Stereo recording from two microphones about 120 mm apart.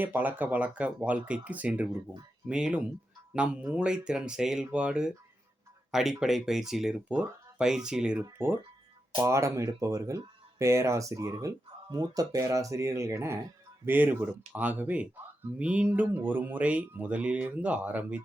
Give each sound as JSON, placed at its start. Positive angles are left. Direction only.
{"t": 0.0, "sound": "speech", "side_deg": -15}
{"t": 8.2, "sound": "speech", "side_deg": -20}